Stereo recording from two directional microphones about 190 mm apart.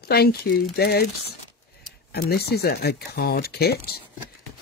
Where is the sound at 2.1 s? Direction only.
55° left (ahead or behind).